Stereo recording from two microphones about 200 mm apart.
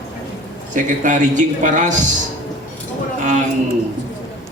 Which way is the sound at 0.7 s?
40° right (ahead or behind).